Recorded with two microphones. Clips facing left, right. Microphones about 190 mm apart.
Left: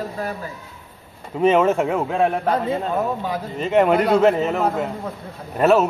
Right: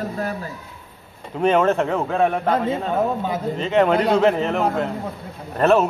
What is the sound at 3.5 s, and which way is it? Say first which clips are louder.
Speech: left 2 dB; 10° left (ahead or behind).